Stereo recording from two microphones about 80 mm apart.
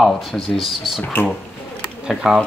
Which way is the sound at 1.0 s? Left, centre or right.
Left.